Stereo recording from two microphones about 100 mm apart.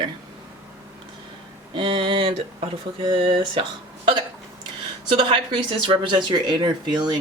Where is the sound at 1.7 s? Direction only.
55° right (ahead or behind).